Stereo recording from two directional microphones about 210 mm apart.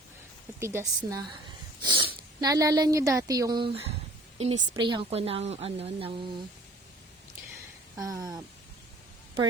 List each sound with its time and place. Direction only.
0.6 s a woman's voice: 10° right (ahead or behind)
8.0 s a woman's voice: 15° right (ahead or behind)